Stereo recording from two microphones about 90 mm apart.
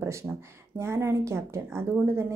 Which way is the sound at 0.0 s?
30° right (ahead or behind).